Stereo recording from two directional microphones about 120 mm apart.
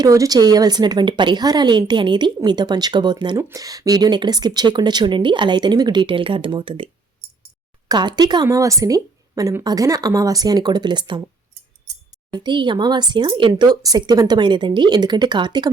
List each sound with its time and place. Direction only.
0.0 s a woman's voice: 30° right (ahead or behind); by 7.3 s 45° right (ahead or behind)
7.9 s a woman's voice: 35° right (ahead or behind)
12.3 s a woman's voice: 40° right (ahead or behind)
13.5 s a woman's voice: 30° right (ahead or behind)